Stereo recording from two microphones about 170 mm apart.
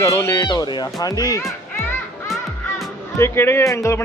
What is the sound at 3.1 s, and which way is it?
Speech, 15° left (ahead or behind).